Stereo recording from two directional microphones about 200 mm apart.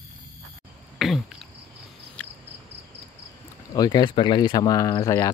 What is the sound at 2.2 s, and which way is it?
Cricket, 5° left (ahead or behind).